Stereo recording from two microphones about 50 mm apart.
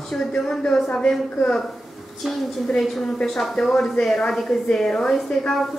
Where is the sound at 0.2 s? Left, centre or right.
Centre.